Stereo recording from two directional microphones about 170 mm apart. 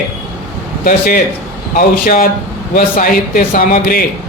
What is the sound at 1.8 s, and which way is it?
A man's voice, 55° left (ahead or behind).